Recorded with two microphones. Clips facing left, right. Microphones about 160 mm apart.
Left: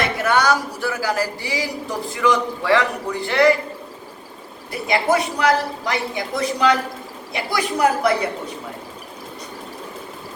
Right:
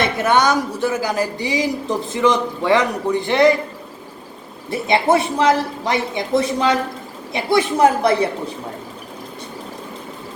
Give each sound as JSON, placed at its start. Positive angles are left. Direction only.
{"t": 0.0, "sound": "speech", "side_deg": -20}
{"t": 4.7, "sound": "speech", "side_deg": -25}